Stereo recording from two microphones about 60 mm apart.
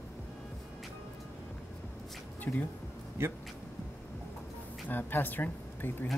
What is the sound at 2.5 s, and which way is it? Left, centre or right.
Speech, left.